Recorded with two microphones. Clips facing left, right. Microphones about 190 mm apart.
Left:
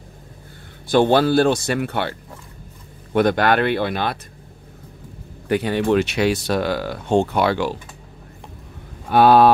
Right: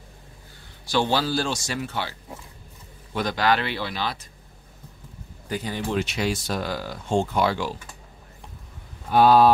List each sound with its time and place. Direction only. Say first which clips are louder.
0.8 s speech: left 8 dB; 55° left (ahead or behind)
5.5 s speech: left 9 dB; 65° left (ahead or behind)
9.1 s speech: left 3 dB; 65° left (ahead or behind)